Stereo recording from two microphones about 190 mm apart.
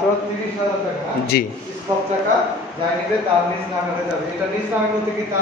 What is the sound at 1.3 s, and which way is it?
Speech, 55° left (ahead or behind).